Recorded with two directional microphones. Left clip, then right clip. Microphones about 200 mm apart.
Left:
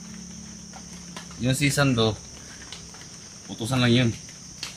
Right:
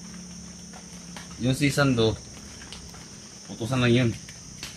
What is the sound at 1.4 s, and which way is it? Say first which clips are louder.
Speech: even; 50° left (ahead or behind).